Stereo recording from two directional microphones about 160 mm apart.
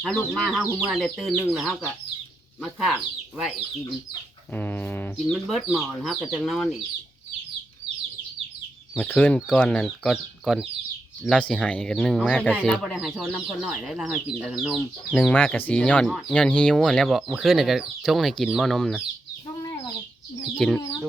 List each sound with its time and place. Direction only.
0.0 s speech: 5° left (ahead or behind)
4.5 s a sound: 10° left (ahead or behind)
5.3 s speech: centre (ahead or behind)
9.0 s speech: 10° left (ahead or behind)
19.6 s bird: 25° left (ahead or behind)
20.6 s speech: 5° left (ahead or behind)